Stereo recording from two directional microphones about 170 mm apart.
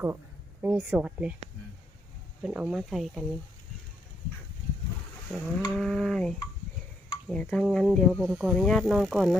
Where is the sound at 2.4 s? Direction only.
5° right (ahead or behind).